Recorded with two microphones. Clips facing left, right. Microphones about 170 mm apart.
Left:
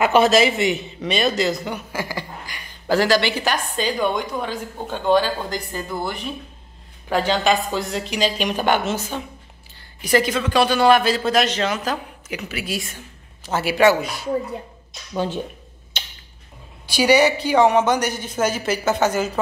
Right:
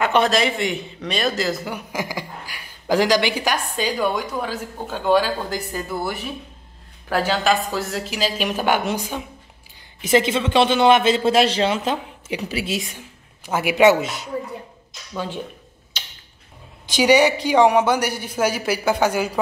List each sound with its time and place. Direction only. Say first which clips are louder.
0.0 s speech: left 3 dB; 5° left (ahead or behind)
1.9 s a woman's voice: even; 15° right (ahead or behind)
10.0 s a man's voice: right 1 dB; 25° right (ahead or behind)
16.8 s a woman's voice: even; 15° right (ahead or behind)